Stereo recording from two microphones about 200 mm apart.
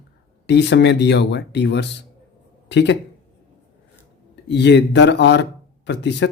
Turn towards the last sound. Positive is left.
turn(degrees=60)  # may be behind; listen again after turning